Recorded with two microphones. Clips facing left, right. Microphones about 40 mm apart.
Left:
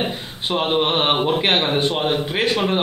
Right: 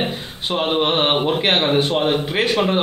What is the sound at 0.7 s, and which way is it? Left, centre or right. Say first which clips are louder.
A man's voice: right 1 dB; centre.